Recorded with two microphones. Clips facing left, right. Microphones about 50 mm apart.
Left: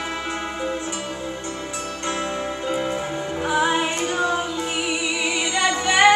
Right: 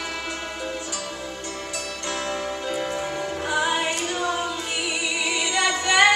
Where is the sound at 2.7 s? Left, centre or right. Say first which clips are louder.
Left 4 dB; left.